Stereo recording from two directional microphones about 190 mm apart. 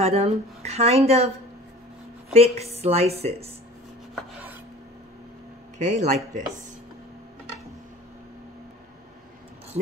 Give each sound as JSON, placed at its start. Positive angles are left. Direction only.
{"t": 0.0, "sound": "speech", "side_deg": -30}
{"t": 2.3, "sound": "speech", "side_deg": -35}
{"t": 5.8, "sound": "speech", "side_deg": -40}